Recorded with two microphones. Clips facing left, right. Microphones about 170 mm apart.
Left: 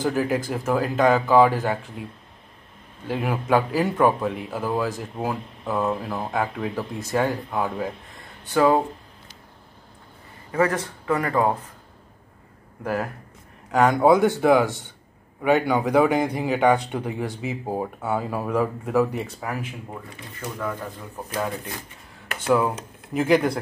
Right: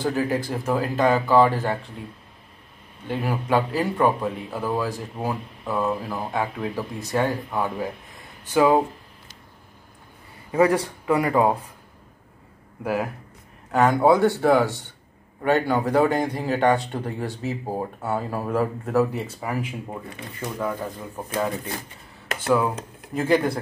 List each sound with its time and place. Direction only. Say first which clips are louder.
0.0 s speech: left 1 dB; centre (ahead or behind)
3.1 s speech: left 2 dB; centre (ahead or behind)
10.5 s speech: right 3 dB; 15° right (ahead or behind)
12.8 s speech: right 1 dB; 5° right (ahead or behind)
14.1 s speech: left 1 dB; 15° left (ahead or behind)
15.8 s speech: left 1 dB; 10° left (ahead or behind)
22.5 s speech: left 1 dB; centre (ahead or behind)
23.1 s speech: left 1 dB; 10° left (ahead or behind)